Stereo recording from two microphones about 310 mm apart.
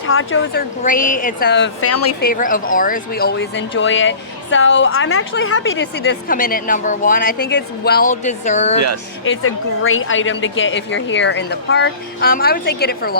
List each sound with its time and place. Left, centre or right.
0.1 s a woman's voice: left
0.8 s speech: left
1.9 s a woman's voice: left
2.2 s a woman's voice: left
9.2 s a woman's voice: left